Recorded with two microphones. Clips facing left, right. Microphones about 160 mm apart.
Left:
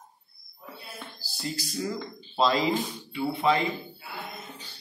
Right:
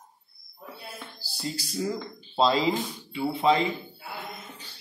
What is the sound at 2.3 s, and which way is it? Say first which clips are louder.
Speech: right 1 dB; 30° right (ahead or behind).